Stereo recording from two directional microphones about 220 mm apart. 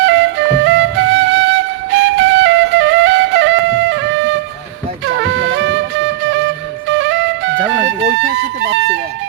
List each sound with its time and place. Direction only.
0.0 s flute: 55° right (ahead or behind)
5.0 s music: 55° right (ahead or behind)